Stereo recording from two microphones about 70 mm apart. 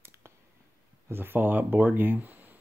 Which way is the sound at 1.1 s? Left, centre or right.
Right.